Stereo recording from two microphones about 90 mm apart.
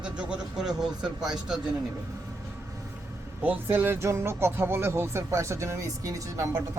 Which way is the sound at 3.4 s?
20° right (ahead or behind).